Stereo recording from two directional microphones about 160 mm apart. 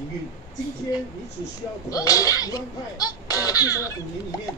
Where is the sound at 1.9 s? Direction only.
20° left (ahead or behind).